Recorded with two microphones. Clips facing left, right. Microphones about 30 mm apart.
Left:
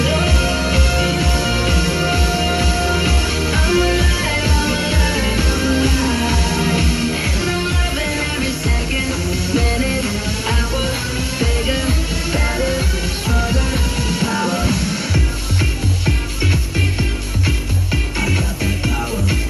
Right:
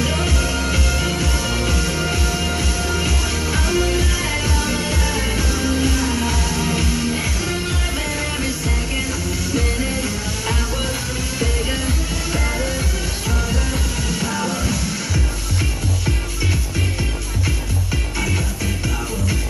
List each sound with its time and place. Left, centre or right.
0.0 s music: left
11.3 s music: left
14.0 s music: left